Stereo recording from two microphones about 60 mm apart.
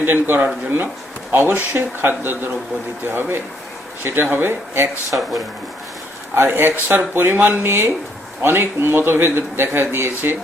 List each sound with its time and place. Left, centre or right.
0.0 s a man's voice: right
6.3 s a man's voice: right